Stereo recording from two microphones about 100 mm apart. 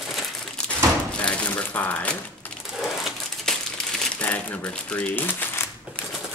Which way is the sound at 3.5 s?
5° left (ahead or behind).